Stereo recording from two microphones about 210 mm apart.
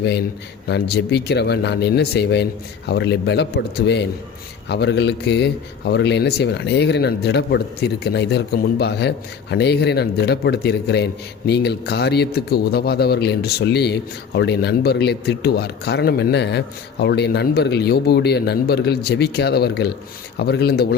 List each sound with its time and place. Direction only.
0.7 s a man's voice: 50° left (ahead or behind)